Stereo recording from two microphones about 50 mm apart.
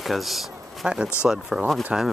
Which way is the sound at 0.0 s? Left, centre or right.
Centre.